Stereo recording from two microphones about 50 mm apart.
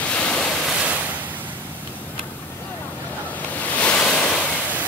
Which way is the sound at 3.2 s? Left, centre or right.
Left.